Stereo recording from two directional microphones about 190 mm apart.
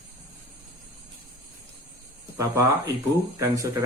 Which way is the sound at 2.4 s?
15° right (ahead or behind).